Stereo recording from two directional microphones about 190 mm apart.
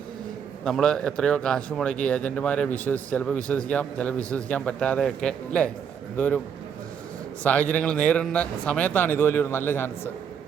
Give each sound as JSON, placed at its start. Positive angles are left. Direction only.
{"t": 0.6, "sound": "a man's voice", "side_deg": 5}
{"t": 7.4, "sound": "a man's voice", "side_deg": 5}